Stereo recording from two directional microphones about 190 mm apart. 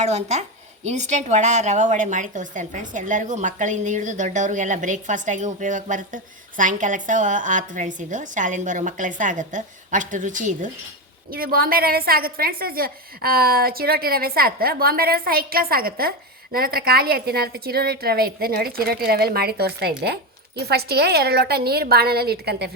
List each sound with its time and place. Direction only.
0.0 s a woman's voice: 35° right (ahead or behind); by 22.7 s 60° right (ahead or behind)